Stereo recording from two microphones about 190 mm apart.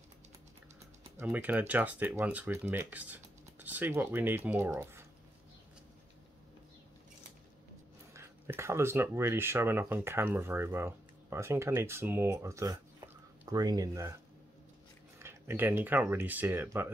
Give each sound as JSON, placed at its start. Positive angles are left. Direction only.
{"t": 1.1, "sound": "speech", "side_deg": -10}
{"t": 8.1, "sound": "speech", "side_deg": -15}
{"t": 15.1, "sound": "speech", "side_deg": -15}